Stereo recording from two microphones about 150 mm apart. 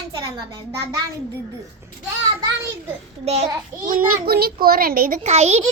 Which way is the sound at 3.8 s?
70° right (ahead or behind).